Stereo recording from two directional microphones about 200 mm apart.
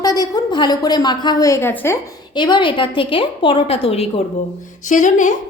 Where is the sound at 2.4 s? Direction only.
20° left (ahead or behind).